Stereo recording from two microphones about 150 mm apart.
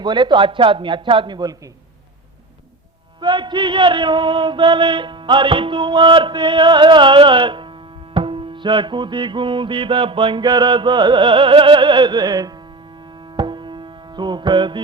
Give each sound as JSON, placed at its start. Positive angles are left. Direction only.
{"t": 0.0, "sound": "music", "side_deg": -30}
{"t": 3.2, "sound": "music", "side_deg": -30}